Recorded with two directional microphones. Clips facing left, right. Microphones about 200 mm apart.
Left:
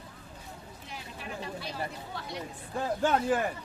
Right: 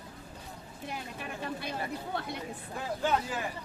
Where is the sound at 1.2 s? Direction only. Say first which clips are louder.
Left 2 dB; 55° right (ahead or behind).